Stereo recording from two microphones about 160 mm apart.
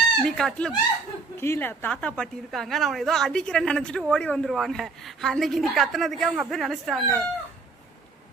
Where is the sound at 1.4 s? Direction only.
15° left (ahead or behind).